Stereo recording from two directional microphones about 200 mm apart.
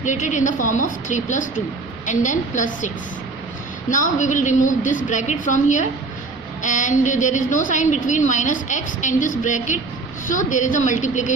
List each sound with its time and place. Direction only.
0.0 s a woman's voice: 40° left (ahead or behind)